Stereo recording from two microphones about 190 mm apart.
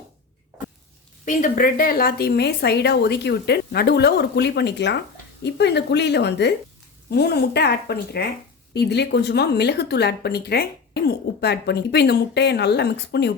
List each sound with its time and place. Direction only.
1.2 s speech: 45° left (ahead or behind); by 13.3 s 60° left (ahead or behind)